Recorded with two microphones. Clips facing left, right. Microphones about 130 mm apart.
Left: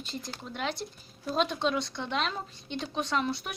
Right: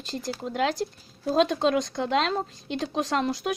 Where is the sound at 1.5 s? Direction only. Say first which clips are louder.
Right 6 dB; 45° right (ahead or behind).